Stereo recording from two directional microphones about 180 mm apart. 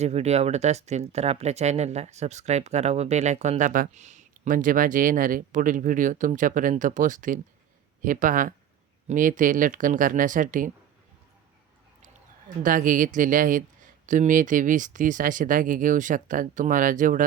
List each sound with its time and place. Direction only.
0.0 s speech: 35° right (ahead or behind)
12.6 s speech: 50° right (ahead or behind)